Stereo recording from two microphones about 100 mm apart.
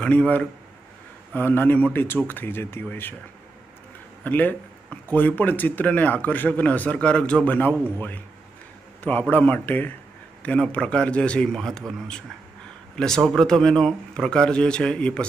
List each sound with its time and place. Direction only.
0.0 s speech: 10° left (ahead or behind)
4.2 s speech: 20° left (ahead or behind)
9.3 s speech: 15° left (ahead or behind)